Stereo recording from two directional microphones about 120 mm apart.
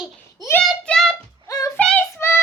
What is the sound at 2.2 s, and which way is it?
Child singing, 20° left (ahead or behind).